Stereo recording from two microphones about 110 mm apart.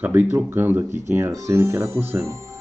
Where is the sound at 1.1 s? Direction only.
25° right (ahead or behind).